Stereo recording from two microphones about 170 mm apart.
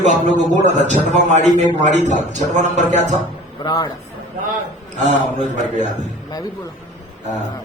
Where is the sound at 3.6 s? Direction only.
25° left (ahead or behind).